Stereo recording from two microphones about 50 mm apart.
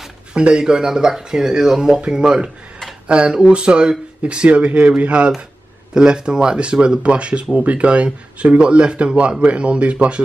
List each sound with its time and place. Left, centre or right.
0.3 s speech: centre